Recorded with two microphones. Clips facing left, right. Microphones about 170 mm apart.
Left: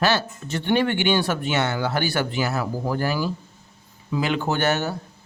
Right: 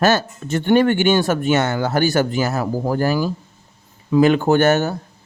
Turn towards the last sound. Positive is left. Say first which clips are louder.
# right 8 dB
turn(degrees=-45)  # may be behind; listen again after turning